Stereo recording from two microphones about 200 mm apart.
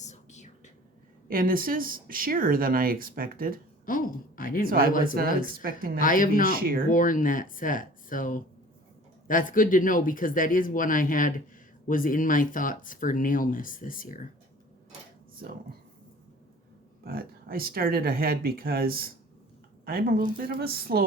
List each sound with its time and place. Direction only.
0.0 s whispering: 35° left (ahead or behind)
1.3 s speech: 45° right (ahead or behind)
3.8 s speech: 45° left (ahead or behind)
5.6 s speech: 45° right (ahead or behind)
6.0 s speech: 45° left (ahead or behind)
6.4 s speech: 45° right (ahead or behind)
6.9 s speech: 40° left (ahead or behind)
17.0 s speech: 50° right (ahead or behind)